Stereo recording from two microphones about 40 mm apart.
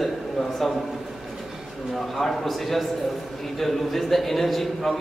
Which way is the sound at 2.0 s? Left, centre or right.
Centre.